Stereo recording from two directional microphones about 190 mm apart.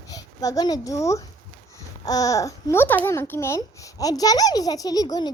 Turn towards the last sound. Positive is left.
turn(degrees=20)  # may be behind; listen again after turning